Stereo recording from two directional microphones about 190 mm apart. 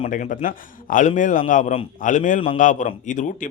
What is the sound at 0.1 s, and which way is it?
A man's voice, 45° left (ahead or behind).